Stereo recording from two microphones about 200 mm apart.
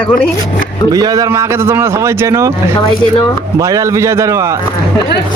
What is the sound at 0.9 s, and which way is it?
A man's voice, 20° right (ahead or behind).